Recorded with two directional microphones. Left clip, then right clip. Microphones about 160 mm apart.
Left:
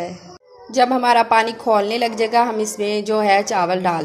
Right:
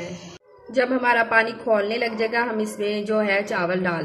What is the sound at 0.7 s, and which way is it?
A woman's voice, 50° left (ahead or behind).